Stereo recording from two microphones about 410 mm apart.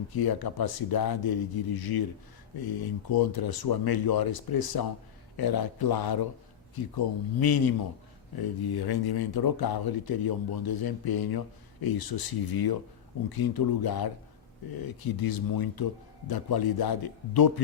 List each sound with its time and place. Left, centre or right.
0.1 s speech: left